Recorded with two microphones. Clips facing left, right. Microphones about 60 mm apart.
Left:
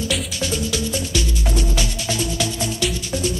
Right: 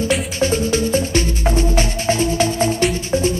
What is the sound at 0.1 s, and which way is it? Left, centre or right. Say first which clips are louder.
Music: right 6 dB; right.